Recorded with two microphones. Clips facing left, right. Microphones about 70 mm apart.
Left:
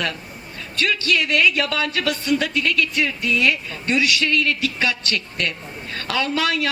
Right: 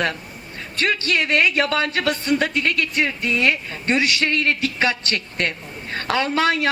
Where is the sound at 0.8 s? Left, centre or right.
Right.